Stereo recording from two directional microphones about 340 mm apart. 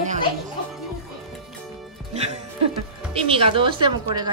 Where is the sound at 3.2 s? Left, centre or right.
Centre.